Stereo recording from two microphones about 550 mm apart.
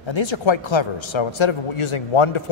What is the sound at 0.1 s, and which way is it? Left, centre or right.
A man's voice, left.